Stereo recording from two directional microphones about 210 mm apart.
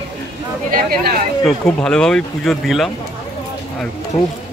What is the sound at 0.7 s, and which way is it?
Speech, 45° right (ahead or behind).